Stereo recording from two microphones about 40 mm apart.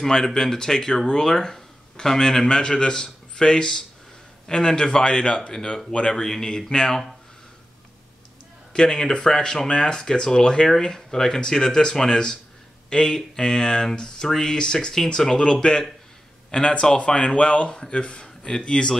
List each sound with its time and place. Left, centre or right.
0.0 s speech: centre
6.2 s speech: centre
8.7 s speech: centre
16.4 s a sound: centre
17.0 s speech: left